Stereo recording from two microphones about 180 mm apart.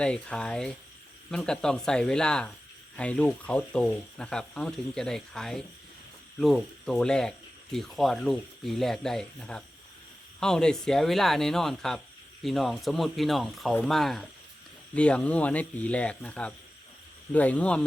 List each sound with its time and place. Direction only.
0.0 s speech: 5° left (ahead or behind)